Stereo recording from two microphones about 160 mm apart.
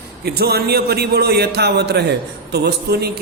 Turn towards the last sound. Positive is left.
turn(degrees=-85)